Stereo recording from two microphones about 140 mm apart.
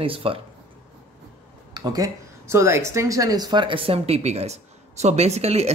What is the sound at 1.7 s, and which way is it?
Speech, 25° right (ahead or behind).